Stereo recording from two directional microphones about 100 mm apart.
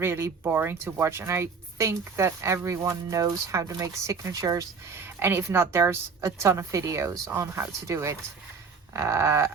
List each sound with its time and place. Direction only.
0.0 s speech: 25° right (ahead or behind)
4.9 s speech: 20° right (ahead or behind)